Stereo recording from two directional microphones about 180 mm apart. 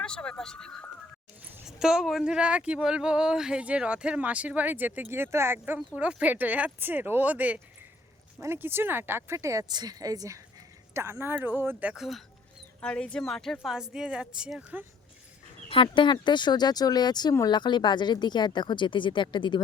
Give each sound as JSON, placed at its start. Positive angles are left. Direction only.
{"t": 0.0, "sound": "speech", "side_deg": 5}
{"t": 15.7, "sound": "speech", "side_deg": 30}